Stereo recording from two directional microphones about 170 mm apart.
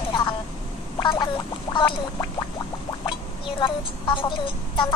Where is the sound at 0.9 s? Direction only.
30° left (ahead or behind).